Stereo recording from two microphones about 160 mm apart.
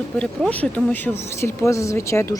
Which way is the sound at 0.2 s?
5° left (ahead or behind).